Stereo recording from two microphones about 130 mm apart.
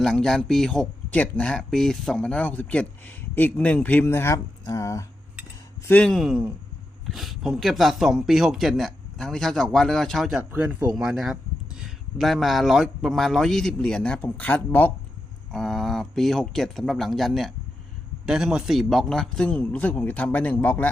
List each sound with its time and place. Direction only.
0.0 s a man's voice: 5° left (ahead or behind); by 5.0 s 25° left (ahead or behind)
5.9 s speech: 5° left (ahead or behind)
10.5 s speech: 15° right (ahead or behind)
10.9 s speech: 5° right (ahead or behind); by 14.9 s 10° left (ahead or behind)
15.5 s a man's voice: centre (ahead or behind)